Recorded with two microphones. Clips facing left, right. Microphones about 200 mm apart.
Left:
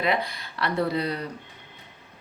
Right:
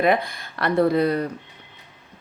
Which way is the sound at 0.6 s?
50° right (ahead or behind).